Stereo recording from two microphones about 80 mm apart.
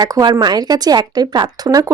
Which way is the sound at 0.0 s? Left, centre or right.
Right.